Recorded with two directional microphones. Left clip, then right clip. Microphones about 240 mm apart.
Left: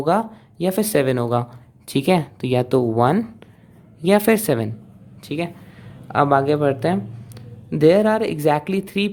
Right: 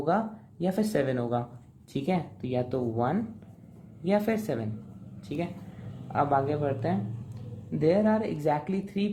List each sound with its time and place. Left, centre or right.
0.0 s speech: left